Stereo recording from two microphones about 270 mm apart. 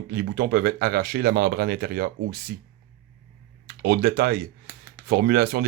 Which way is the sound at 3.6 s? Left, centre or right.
Right.